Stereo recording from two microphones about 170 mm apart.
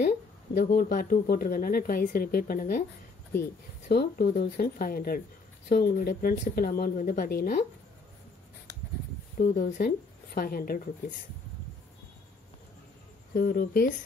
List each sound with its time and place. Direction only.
0.6 s speech: 65° left (ahead or behind)
3.9 s speech: 70° left (ahead or behind)
9.4 s a woman's voice: 55° left (ahead or behind)
13.3 s speech: 60° left (ahead or behind)